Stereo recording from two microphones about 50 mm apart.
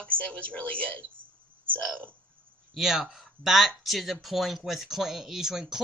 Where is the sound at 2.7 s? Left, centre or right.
Centre.